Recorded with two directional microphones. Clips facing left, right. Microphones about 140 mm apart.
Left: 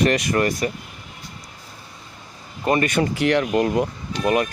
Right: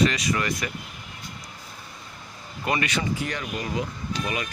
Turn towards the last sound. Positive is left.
turn(degrees=55)  # may be behind; listen again after turning